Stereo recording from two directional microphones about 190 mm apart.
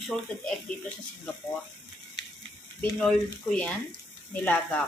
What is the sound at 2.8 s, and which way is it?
Speech, 5° left (ahead or behind).